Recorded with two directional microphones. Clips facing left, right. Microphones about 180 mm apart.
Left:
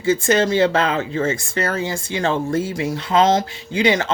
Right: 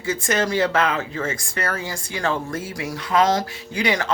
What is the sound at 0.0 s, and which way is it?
Speech, 25° left (ahead or behind).